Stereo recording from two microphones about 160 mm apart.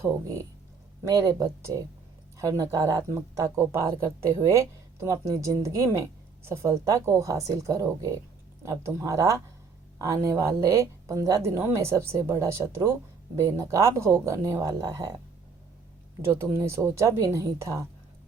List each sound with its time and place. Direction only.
0.0 s speech: 20° right (ahead or behind)
16.3 s speech: 15° right (ahead or behind)